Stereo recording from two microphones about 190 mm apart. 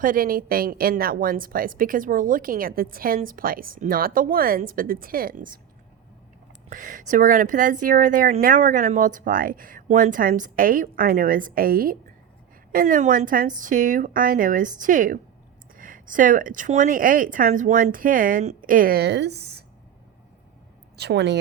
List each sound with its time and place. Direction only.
0.0 s a woman's voice: 50° right (ahead or behind)
6.7 s a woman's voice: 45° right (ahead or behind); by 19.6 s 60° right (ahead or behind)
20.9 s a woman's voice: 60° right (ahead or behind)